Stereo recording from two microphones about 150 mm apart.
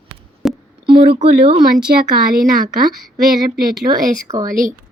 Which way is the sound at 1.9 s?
80° right.